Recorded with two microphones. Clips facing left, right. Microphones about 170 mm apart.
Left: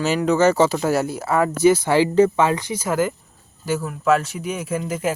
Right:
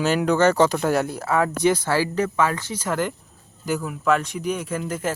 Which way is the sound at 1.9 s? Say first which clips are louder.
Left 6 dB; 25° left (ahead or behind).